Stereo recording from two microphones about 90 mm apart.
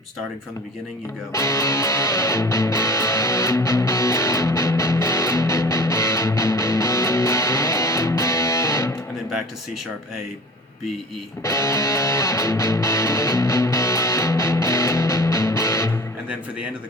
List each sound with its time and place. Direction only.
1.3 s music: 35° left (ahead or behind)
11.4 s music: 35° left (ahead or behind)